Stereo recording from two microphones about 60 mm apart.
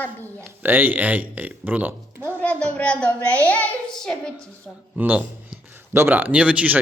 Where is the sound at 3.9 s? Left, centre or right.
Centre.